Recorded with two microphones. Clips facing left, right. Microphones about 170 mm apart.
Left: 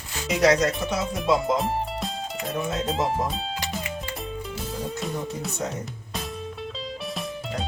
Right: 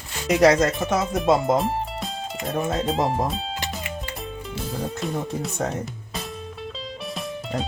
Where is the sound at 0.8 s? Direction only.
45° right (ahead or behind).